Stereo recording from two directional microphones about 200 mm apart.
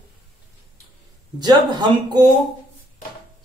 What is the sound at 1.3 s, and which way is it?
Speech, 20° right (ahead or behind).